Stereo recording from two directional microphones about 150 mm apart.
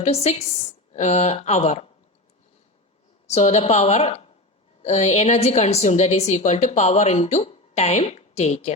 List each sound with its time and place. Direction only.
0.0 s a woman's voice: 45° left (ahead or behind)
3.2 s a woman's voice: 45° left (ahead or behind)